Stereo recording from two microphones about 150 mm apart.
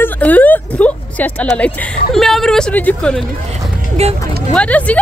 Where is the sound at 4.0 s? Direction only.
45° right (ahead or behind).